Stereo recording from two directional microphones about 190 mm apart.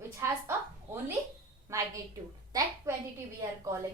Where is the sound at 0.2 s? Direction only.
15° right (ahead or behind).